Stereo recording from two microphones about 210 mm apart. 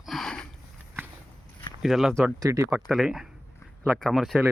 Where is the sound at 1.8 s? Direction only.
Centre (ahead or behind).